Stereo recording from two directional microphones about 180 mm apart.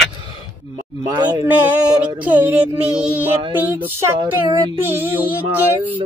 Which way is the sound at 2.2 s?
10° right (ahead or behind).